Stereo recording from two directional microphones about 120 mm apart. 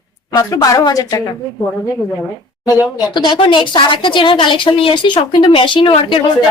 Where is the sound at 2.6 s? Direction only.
30° left (ahead or behind).